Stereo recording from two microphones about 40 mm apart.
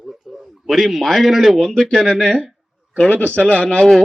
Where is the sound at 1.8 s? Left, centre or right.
Centre.